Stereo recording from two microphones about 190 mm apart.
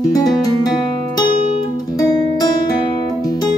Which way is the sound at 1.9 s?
20° left (ahead or behind).